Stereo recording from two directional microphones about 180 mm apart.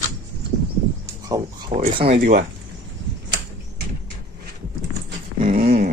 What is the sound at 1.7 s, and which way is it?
Speech, 30° right (ahead or behind).